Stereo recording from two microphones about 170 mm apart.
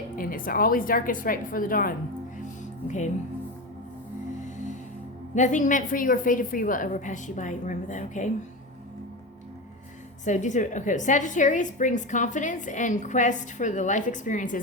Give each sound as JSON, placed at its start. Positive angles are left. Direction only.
{"t": 0.2, "sound": "a woman's voice", "side_deg": 55}
{"t": 2.6, "sound": "music", "side_deg": 45}
{"t": 4.4, "sound": "music", "side_deg": 45}
{"t": 5.3, "sound": "a woman's voice", "side_deg": 45}
{"t": 10.2, "sound": "a woman's voice", "side_deg": 45}